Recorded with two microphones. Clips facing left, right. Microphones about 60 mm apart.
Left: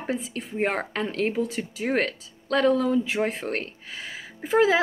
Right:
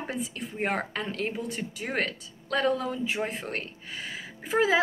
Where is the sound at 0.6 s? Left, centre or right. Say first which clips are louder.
Left 3 dB; left.